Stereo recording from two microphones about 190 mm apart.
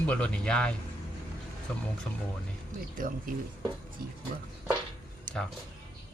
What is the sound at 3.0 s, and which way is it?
Speech, 45° right (ahead or behind).